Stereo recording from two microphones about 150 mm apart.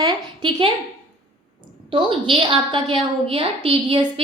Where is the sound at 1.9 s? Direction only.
35° right (ahead or behind).